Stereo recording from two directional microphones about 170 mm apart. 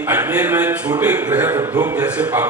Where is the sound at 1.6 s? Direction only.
25° right (ahead or behind).